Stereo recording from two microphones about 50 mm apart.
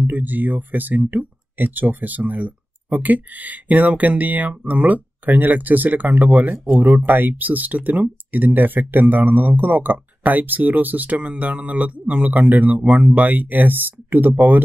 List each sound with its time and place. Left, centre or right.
0.0 s speech: right